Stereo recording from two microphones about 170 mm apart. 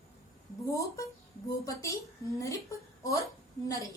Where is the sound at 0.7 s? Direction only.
20° left (ahead or behind).